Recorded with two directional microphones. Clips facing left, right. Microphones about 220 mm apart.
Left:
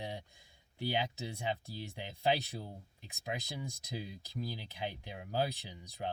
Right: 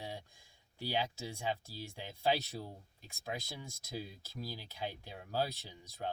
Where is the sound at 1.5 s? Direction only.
20° left (ahead or behind).